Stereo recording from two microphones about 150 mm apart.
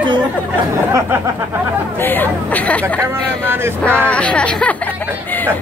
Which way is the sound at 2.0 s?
10° left (ahead or behind).